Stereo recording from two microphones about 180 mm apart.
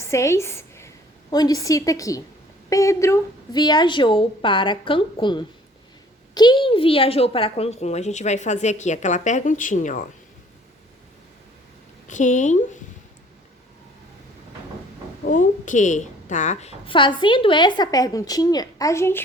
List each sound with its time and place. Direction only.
0.0 s a woman's voice: 15° left (ahead or behind); by 10.0 s 45° left (ahead or behind)
12.0 s a woman's voice: 45° left (ahead or behind)
15.2 s a woman's voice: 45° left (ahead or behind); by 19.2 s 15° left (ahead or behind)